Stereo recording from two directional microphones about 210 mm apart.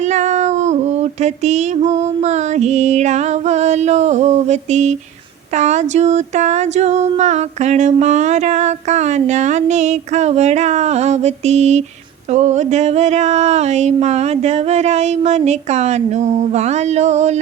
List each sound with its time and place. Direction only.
0.1 s cat: 35° right (ahead or behind)
2.0 s female singing: 35° right (ahead or behind)